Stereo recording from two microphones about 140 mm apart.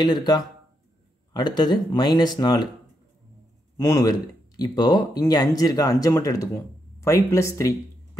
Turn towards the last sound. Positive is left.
turn(degrees=20)  # may be behind; listen again after turning